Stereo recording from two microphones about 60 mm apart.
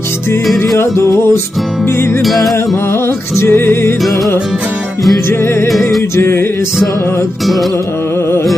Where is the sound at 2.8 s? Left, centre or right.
Left.